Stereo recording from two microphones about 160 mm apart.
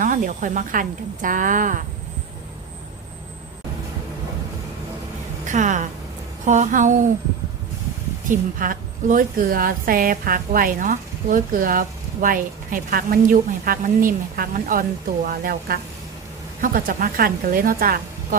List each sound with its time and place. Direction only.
0.0 s a woman's voice: 55° right (ahead or behind)
5.5 s a woman's voice: 50° right (ahead or behind)
8.3 s a woman's voice: 60° right (ahead or behind)